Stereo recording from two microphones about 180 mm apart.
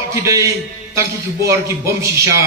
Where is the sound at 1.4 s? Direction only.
15° right (ahead or behind).